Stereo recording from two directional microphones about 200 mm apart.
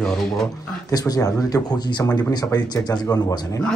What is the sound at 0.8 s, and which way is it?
Speech, 20° left (ahead or behind).